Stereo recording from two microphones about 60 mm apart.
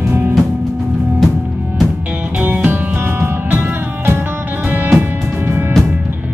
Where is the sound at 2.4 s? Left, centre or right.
Right.